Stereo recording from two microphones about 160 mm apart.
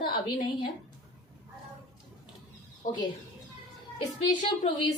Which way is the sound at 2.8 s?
55° left (ahead or behind).